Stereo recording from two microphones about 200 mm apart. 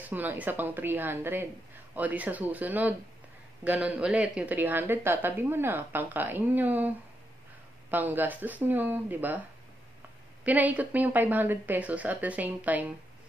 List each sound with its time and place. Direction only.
0.0 s speech: 10° right (ahead or behind)
7.9 s speech: 10° right (ahead or behind)
10.4 s speech: 10° right (ahead or behind)